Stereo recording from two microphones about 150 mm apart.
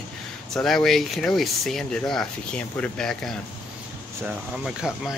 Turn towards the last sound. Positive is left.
turn(degrees=-5)  # may be behind; listen again after turning